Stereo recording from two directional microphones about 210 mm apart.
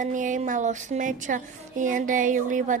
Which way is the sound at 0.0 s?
35° right (ahead or behind).